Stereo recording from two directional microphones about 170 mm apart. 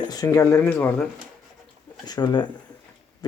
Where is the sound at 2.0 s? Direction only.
25° left (ahead or behind).